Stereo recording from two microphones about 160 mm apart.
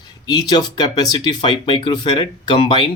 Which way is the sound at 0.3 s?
25° left (ahead or behind).